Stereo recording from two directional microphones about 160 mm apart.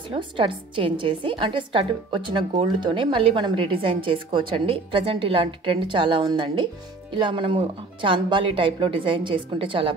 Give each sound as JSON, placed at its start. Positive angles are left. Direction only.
{"t": 0.1, "sound": "a woman's voice", "side_deg": -30}